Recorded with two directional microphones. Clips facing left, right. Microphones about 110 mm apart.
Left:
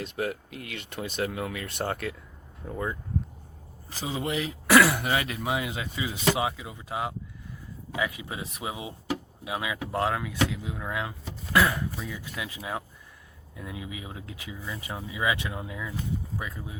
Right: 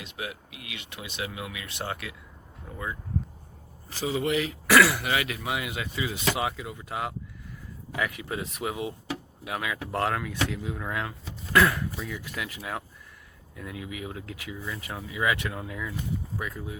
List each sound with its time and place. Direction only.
0.0 s speech: 45° left (ahead or behind)
3.9 s speech: 20° left (ahead or behind)